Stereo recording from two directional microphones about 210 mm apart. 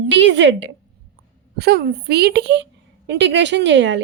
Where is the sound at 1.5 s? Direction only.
50° right (ahead or behind).